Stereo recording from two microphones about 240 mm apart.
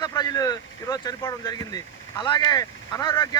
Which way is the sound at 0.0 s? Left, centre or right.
Centre.